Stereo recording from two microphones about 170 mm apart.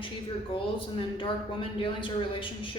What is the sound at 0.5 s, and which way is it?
A man's voice, 30° left (ahead or behind).